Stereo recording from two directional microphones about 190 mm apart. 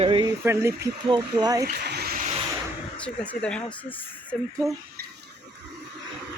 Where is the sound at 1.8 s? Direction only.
55° right (ahead or behind).